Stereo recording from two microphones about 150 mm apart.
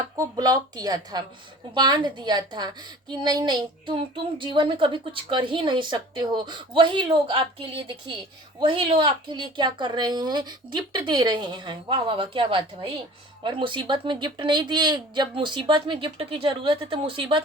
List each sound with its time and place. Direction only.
0.2 s a woman's voice: 25° right (ahead or behind)